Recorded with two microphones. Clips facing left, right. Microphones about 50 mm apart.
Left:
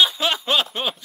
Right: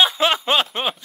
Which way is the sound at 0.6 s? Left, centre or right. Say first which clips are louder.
Right 2 dB; centre.